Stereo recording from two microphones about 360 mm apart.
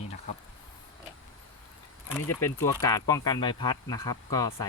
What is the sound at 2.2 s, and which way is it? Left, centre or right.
Speech, centre.